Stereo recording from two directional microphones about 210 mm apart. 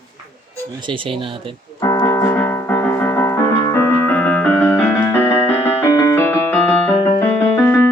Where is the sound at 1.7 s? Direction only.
15° left (ahead or behind).